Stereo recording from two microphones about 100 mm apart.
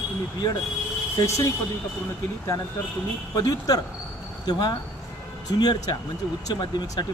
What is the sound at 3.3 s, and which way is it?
Speech, 40° left (ahead or behind).